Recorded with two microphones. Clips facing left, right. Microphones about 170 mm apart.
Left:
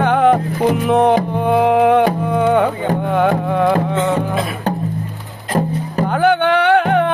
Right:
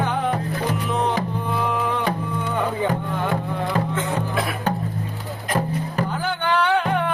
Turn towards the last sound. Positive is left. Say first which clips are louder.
# left 7 dB
turn(degrees=65)  # may be behind; listen again after turning